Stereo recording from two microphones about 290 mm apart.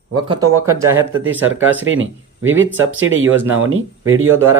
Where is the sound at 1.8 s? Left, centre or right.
Right.